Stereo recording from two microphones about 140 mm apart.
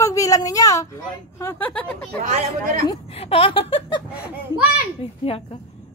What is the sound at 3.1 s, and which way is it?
Speech, 45° left (ahead or behind).